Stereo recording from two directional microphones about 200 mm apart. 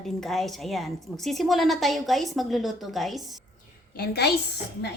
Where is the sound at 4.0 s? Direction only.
55° left (ahead or behind).